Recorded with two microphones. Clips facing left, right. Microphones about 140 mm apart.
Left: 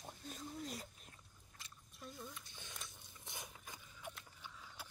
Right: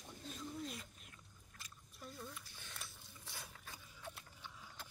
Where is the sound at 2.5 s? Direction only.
20° left (ahead or behind).